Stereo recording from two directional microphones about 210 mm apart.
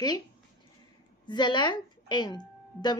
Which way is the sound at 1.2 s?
20° left (ahead or behind).